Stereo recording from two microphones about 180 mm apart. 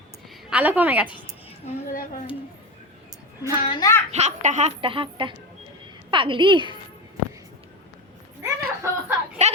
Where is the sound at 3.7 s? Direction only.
20° left (ahead or behind).